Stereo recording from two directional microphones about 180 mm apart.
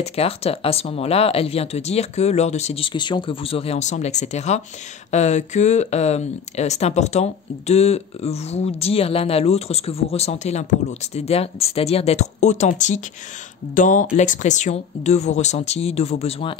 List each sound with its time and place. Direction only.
0.0 s speech: 35° left (ahead or behind)